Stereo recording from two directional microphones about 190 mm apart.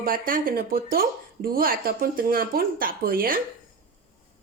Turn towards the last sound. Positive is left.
turn(degrees=-50)  # may be behind; listen again after turning